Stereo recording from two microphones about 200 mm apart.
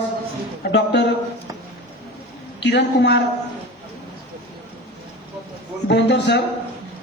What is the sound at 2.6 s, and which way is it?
Speech, 60° left (ahead or behind).